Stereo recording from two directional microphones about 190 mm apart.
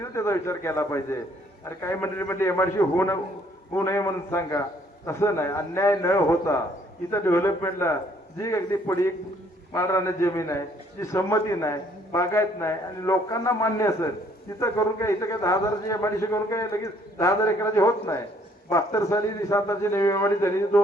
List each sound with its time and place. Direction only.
0.1 s a man's voice: 15° left (ahead or behind)